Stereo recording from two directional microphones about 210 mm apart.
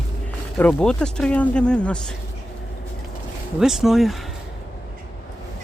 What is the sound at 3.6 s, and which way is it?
Speech, centre (ahead or behind).